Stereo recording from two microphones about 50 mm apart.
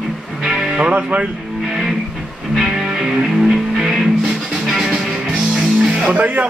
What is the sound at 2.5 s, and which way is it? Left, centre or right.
Music, centre.